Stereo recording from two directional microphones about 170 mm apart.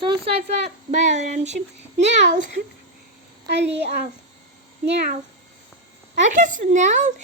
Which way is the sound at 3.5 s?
90° right.